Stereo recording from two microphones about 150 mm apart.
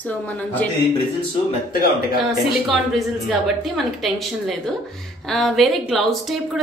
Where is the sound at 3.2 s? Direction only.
Centre (ahead or behind).